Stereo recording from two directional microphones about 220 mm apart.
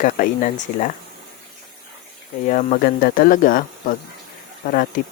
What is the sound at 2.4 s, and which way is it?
Speech, 35° left (ahead or behind).